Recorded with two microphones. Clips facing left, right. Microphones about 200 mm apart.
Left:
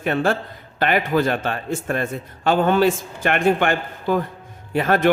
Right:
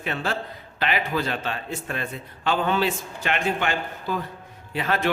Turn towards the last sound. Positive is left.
turn(degrees=50)  # may be behind; listen again after turning